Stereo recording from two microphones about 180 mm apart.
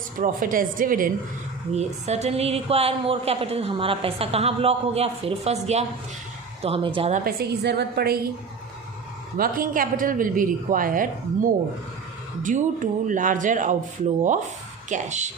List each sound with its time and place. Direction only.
0.2 s a woman's voice: 50° right (ahead or behind)
1.7 s a woman's voice: 35° right (ahead or behind)
7.1 s a woman's voice: 55° right (ahead or behind)
9.4 s a woman's voice: 50° right (ahead or behind)
14.8 s a woman's voice: 40° right (ahead or behind)